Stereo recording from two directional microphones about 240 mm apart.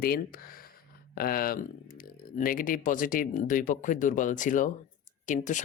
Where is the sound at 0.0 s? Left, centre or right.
Left.